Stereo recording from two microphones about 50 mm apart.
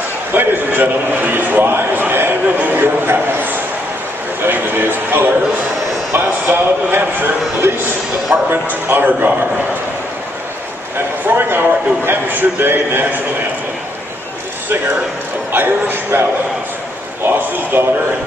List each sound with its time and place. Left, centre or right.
0.3 s a man's voice: right
4.4 s a sound: right
6.4 s a man's voice: right
11.2 s a man's voice: right
15.5 s a man's voice: right